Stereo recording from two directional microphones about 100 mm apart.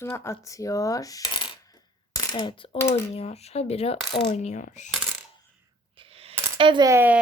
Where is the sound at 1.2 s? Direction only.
55° left (ahead or behind).